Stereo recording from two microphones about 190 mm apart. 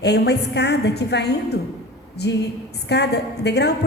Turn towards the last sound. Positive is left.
turn(degrees=60)  # may be behind; listen again after turning